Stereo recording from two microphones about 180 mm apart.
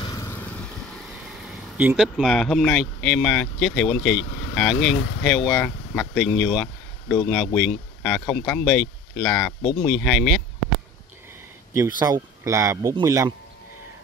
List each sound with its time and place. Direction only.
0.0 s vehicle: 15° left (ahead or behind)
1.8 s speech: 5° right (ahead or behind)
9.6 s speech: 30° left (ahead or behind)
9.8 s speech: centre (ahead or behind)
12.0 s speech: 20° right (ahead or behind)